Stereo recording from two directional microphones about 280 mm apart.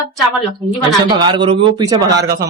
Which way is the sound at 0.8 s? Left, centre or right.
Centre.